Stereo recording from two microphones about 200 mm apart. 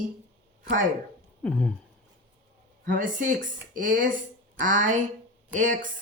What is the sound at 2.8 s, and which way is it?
Speech, 40° right (ahead or behind).